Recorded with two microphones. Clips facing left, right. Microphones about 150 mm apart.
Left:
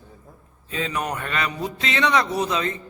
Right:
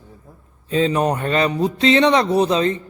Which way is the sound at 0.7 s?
30° right (ahead or behind).